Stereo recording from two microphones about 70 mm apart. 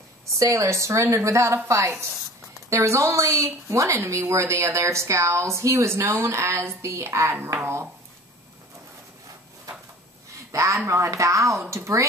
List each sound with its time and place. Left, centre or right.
0.3 s a woman's voice: right
10.3 s a woman's voice: right